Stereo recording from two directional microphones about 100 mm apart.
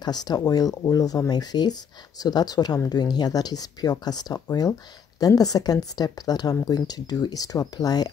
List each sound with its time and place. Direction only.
0.0 s speech: 45° left (ahead or behind)